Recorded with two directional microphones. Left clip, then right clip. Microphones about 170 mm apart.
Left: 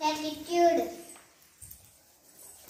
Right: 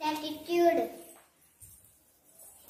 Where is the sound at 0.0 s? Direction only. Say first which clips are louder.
Left 3 dB; 20° right (ahead or behind).